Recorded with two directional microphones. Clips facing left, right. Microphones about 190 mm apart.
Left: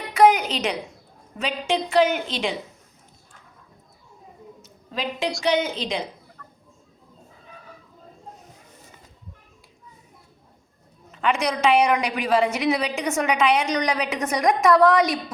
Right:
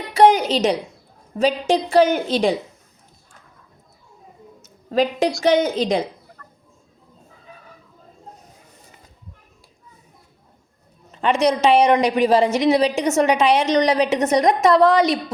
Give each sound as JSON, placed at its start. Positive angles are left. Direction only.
{"t": 0.2, "sound": "a woman's voice", "side_deg": -30}
{"t": 4.6, "sound": "a sound", "side_deg": -40}
{"t": 5.4, "sound": "a woman's voice", "side_deg": -45}
{"t": 11.1, "sound": "a woman's voice", "side_deg": -30}